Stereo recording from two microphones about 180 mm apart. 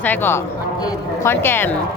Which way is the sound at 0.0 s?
10° left (ahead or behind).